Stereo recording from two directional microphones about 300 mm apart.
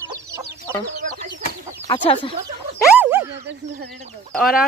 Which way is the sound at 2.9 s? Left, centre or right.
Centre.